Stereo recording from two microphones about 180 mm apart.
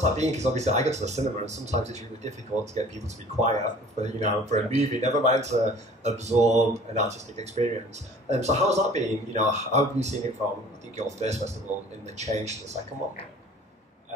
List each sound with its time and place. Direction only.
0.0 s speech: 40° right (ahead or behind)